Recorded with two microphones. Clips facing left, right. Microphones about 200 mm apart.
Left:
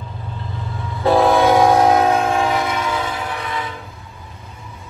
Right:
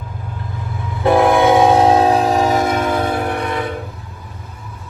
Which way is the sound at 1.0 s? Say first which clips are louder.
Right 2 dB; 15° right (ahead or behind).